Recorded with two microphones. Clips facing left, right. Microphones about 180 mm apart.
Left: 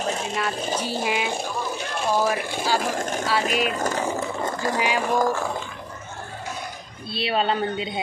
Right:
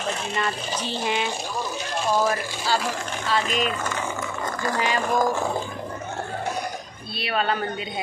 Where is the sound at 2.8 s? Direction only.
50° left (ahead or behind); by 4.7 s 25° left (ahead or behind).